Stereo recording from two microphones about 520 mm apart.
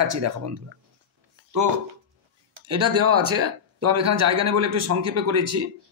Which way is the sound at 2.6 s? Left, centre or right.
Right.